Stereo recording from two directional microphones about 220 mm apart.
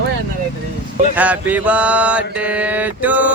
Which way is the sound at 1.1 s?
5° right (ahead or behind).